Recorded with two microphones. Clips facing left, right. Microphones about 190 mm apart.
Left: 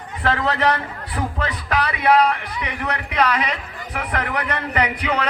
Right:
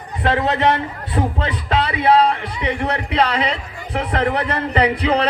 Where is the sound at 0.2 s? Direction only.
20° right (ahead or behind).